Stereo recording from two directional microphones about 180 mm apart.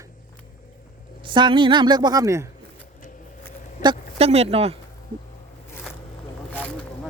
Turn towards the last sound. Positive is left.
turn(degrees=5)  # may be behind; listen again after turning